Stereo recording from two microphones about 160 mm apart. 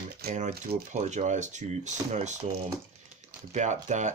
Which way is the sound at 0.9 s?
50° right (ahead or behind).